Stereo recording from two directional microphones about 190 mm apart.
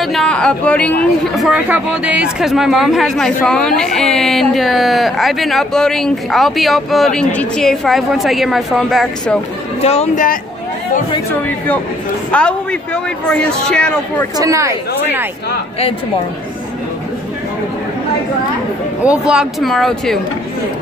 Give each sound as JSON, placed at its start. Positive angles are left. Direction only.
{"t": 0.0, "sound": "speech", "side_deg": 0}
{"t": 9.8, "sound": "speech", "side_deg": 35}
{"t": 12.3, "sound": "speech", "side_deg": 5}
{"t": 14.4, "sound": "speech", "side_deg": -15}
{"t": 19.0, "sound": "speech", "side_deg": -5}